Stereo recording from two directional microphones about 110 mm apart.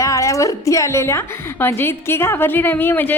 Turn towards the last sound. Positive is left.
turn(degrees=20)  # may be behind; listen again after turning